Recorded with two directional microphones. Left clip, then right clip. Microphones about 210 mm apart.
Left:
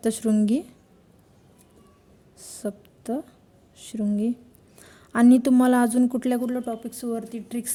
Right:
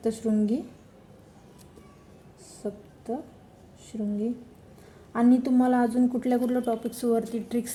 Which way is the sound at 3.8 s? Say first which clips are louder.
Left 4 dB; 55° left (ahead or behind).